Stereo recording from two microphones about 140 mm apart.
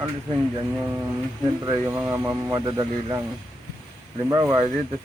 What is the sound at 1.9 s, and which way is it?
Speech, 15° right (ahead or behind).